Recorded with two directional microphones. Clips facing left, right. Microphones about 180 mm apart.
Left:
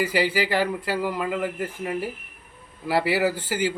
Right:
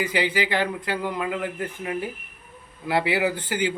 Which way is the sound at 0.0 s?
5° left (ahead or behind).